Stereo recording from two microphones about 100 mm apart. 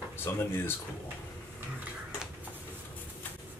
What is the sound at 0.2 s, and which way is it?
Speech, 25° left (ahead or behind).